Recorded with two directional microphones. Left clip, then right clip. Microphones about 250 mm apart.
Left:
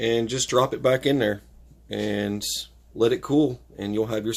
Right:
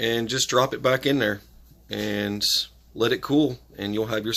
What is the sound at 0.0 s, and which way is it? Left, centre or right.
Speech, centre.